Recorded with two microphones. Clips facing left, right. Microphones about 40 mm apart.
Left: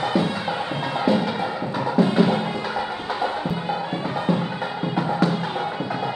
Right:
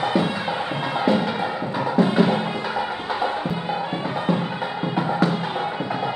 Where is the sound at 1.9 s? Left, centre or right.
Right.